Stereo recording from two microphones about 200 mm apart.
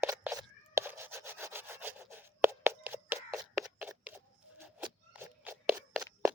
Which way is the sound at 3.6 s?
5° right (ahead or behind).